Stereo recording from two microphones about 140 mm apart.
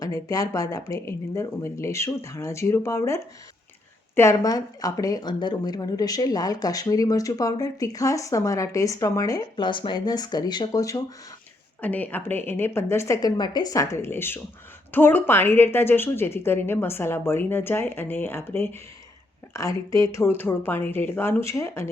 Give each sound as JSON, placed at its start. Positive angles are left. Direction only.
{"t": 0.0, "sound": "speech", "side_deg": 25}
{"t": 11.8, "sound": "a woman's voice", "side_deg": 10}